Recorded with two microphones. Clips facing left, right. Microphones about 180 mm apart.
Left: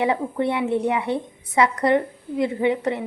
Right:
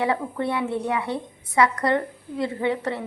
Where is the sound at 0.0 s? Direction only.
20° left (ahead or behind).